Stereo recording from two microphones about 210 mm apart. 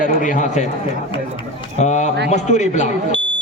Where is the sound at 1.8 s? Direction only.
35° left (ahead or behind).